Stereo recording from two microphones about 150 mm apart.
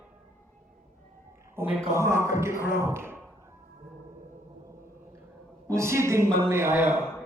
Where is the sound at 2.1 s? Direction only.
20° right (ahead or behind).